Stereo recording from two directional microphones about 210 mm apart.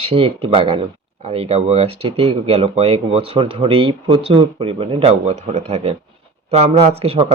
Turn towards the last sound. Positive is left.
turn(degrees=-30)  # may be behind; listen again after turning